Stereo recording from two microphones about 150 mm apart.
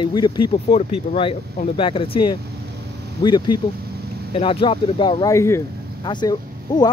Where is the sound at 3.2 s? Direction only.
30° left (ahead or behind).